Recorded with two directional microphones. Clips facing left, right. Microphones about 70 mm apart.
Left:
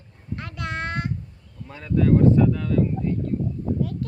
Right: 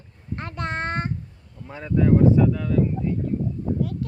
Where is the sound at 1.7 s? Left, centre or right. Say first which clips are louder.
Even; centre.